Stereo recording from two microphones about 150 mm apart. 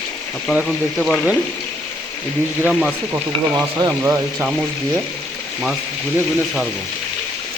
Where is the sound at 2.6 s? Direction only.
5° right (ahead or behind).